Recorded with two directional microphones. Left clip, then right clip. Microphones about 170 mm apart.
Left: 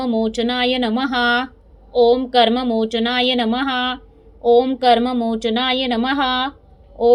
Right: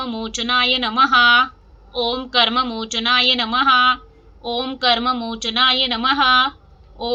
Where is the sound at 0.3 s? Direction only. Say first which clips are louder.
Right 1 dB; 30° left (ahead or behind).